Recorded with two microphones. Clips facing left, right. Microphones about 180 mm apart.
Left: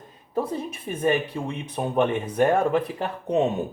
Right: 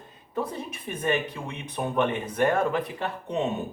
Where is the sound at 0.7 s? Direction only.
30° left (ahead or behind).